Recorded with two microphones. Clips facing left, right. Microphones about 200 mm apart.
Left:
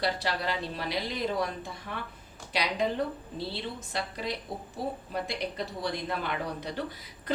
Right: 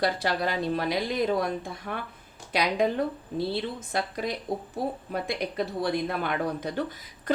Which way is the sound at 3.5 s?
50° right (ahead or behind).